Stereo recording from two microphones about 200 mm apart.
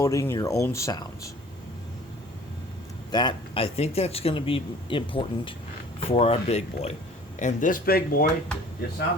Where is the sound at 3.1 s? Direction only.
25° left (ahead or behind); by 8.2 s 45° left (ahead or behind).